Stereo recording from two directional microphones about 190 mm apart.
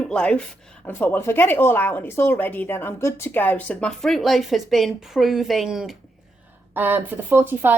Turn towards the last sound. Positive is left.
turn(degrees=-10)  # may be behind; listen again after turning